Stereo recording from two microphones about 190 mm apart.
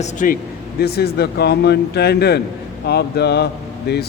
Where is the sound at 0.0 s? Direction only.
45° left (ahead or behind).